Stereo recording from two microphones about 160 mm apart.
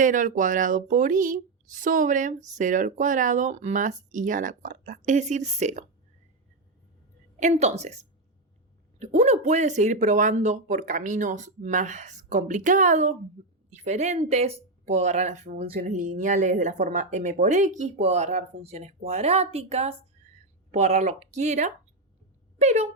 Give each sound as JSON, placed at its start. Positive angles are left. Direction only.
{"t": 0.0, "sound": "speech", "side_deg": -55}
{"t": 7.3, "sound": "a woman's voice", "side_deg": -45}